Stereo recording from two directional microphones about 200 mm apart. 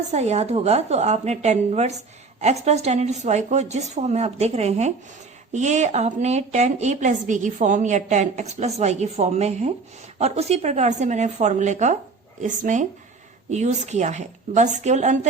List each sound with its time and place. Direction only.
0.1 s a woman's voice: 35° right (ahead or behind)